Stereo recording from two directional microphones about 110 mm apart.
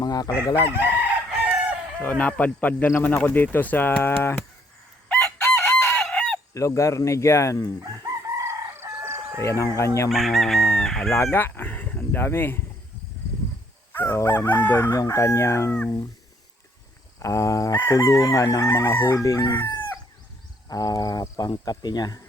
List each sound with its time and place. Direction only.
0.0 s chicken: 35° left (ahead or behind)
0.5 s chicken: 20° right (ahead or behind)
2.0 s speech: 15° left (ahead or behind)
5.0 s chicken: 10° left (ahead or behind)
6.5 s chicken: 25° left (ahead or behind)
8.4 s fowl: 25° right (ahead or behind)
9.4 s chicken: 25° left (ahead or behind)
10.1 s chicken: centre (ahead or behind)
11.1 s chicken: 20° left (ahead or behind)
13.9 s chicken: 20° left (ahead or behind)
14.8 s chicken: 30° left (ahead or behind)
17.2 s chicken: 30° left (ahead or behind)
20.7 s speech: 35° left (ahead or behind)